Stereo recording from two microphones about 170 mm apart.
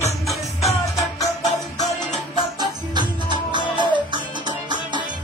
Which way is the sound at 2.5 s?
25° right (ahead or behind).